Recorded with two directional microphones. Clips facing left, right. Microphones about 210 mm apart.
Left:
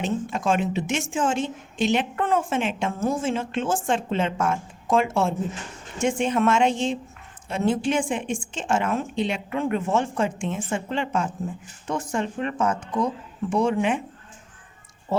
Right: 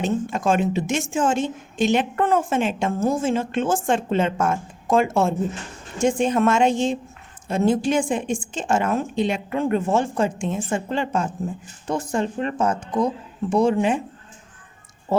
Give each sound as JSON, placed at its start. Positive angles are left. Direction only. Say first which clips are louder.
{"t": 0.0, "sound": "a woman's voice", "louder": "right 3 dB", "side_deg": -45}